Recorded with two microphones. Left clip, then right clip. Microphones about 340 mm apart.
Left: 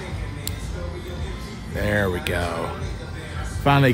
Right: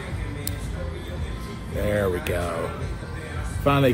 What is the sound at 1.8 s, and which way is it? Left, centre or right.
Music, left.